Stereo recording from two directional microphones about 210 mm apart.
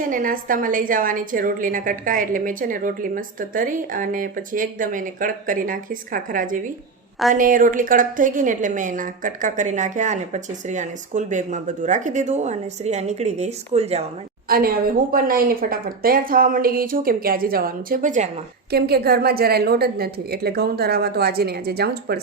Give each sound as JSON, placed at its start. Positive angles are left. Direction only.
{"t": 0.0, "sound": "a woman's voice", "side_deg": -40}
{"t": 14.5, "sound": "a woman's voice", "side_deg": -45}
{"t": 18.7, "sound": "a woman's voice", "side_deg": -50}